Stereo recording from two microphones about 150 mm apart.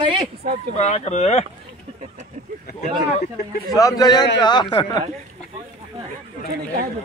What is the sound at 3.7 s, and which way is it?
A man's voice, 25° left (ahead or behind).